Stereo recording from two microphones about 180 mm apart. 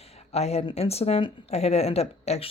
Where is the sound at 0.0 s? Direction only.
35° left (ahead or behind).